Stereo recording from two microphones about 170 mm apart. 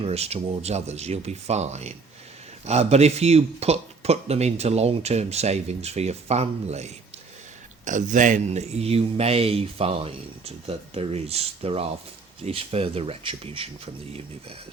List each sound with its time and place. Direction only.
0.0 s speech: 35° right (ahead or behind)